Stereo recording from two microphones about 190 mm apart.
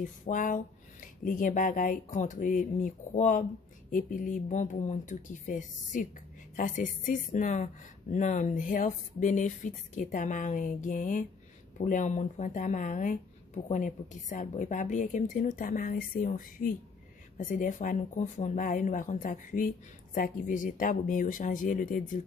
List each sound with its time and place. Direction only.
0.0 s a woman's voice: 45° left (ahead or behind)